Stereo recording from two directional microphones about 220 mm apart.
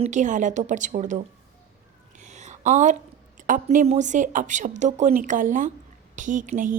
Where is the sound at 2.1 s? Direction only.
30° right (ahead or behind).